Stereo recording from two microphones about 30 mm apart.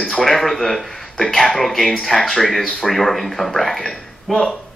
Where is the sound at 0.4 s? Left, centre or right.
Centre.